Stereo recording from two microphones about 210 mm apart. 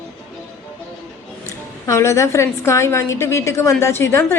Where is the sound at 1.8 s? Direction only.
15° left (ahead or behind).